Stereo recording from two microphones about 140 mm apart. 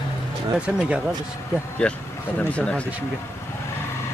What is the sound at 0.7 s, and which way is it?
Speech, 10° right (ahead or behind).